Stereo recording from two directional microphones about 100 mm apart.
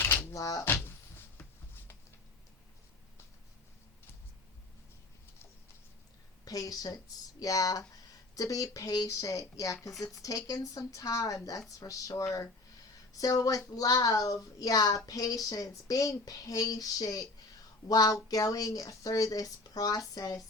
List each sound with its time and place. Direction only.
0.0 s a sound: 20° left (ahead or behind)
0.3 s cupboard open or close: 35° left (ahead or behind)
0.6 s music: 20° left (ahead or behind)
6.4 s speech: 35° left (ahead or behind)